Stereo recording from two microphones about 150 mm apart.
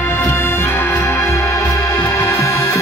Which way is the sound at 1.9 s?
30° left (ahead or behind).